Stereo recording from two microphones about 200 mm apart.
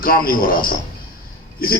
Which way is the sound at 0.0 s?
45° left (ahead or behind).